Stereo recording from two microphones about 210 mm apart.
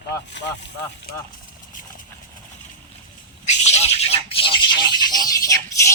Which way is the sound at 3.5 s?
30° left (ahead or behind).